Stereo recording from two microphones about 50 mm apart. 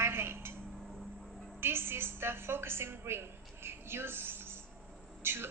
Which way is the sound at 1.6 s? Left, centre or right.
Right.